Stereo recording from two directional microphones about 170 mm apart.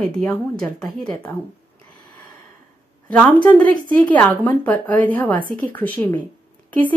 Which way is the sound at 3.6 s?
55° right (ahead or behind).